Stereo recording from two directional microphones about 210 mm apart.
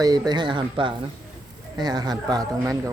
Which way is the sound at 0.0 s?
20° right (ahead or behind).